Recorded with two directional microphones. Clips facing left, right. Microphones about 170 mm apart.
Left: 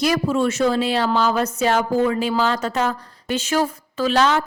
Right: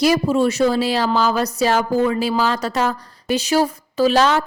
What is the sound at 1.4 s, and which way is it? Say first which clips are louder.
Speech: right 1 dB; 35° right (ahead or behind).